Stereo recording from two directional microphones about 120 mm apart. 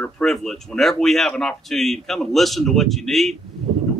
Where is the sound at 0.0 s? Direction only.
5° left (ahead or behind).